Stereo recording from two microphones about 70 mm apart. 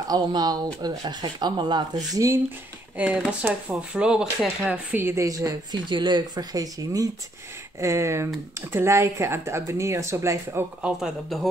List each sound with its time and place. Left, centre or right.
0.1 s speech: right
2.1 s speech: right
3.0 s speech: right
3.9 s speech: centre
4.9 s a woman's voice: right
5.2 s speech: right
7.8 s speech: right
11.0 s speech: centre